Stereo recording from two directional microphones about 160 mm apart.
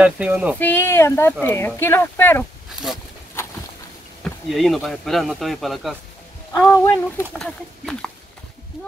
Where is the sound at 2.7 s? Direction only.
5° right (ahead or behind).